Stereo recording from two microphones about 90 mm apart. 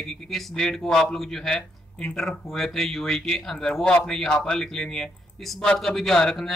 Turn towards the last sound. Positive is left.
turn(degrees=5)  # may be behind; listen again after turning